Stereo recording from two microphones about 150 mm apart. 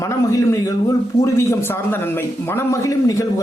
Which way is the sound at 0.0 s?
20° left (ahead or behind).